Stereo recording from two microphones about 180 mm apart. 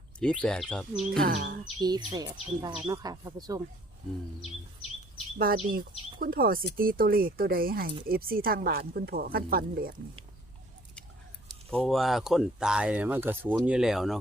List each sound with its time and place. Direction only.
0.2 s speech: 5° left (ahead or behind)
1.1 s speech: 55° right (ahead or behind)
2.1 s speech: 20° right (ahead or behind)
5.4 s speech: 55° right (ahead or behind)
11.7 s speech: centre (ahead or behind)